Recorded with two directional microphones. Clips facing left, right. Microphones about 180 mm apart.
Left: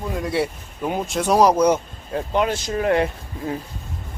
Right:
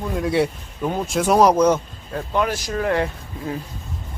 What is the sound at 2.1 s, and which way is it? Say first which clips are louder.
Speech: left 1 dB; 25° left (ahead or behind).